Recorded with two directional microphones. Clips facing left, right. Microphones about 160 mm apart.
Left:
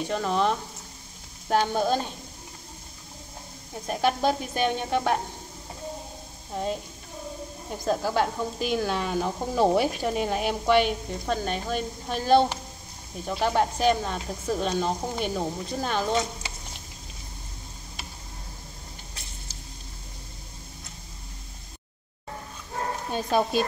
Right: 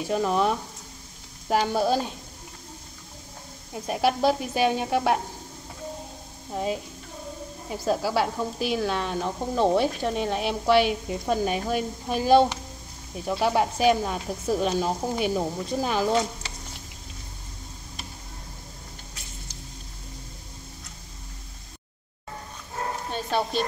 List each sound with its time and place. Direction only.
0.0 s speech: 5° right (ahead or behind)
3.7 s speech: 5° right (ahead or behind)
6.5 s speech: 5° right (ahead or behind)
23.1 s speech: 10° left (ahead or behind)